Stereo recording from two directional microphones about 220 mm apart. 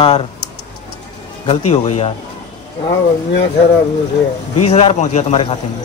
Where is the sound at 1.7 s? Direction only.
30° left (ahead or behind).